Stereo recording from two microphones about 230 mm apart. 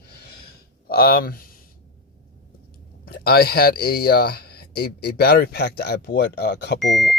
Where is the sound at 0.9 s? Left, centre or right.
Left.